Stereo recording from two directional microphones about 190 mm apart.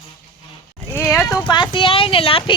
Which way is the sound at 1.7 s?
30° left (ahead or behind).